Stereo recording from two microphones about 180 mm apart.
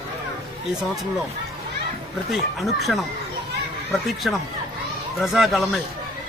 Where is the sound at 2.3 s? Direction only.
Centre (ahead or behind).